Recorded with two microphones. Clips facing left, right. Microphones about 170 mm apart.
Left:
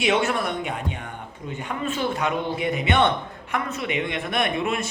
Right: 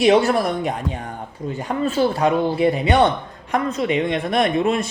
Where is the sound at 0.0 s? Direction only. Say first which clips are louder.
Right 7 dB; 35° right (ahead or behind).